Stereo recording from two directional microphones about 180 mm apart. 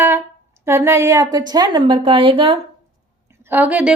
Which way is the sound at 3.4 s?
10° right (ahead or behind).